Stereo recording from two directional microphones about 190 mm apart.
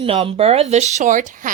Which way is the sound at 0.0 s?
30° right (ahead or behind).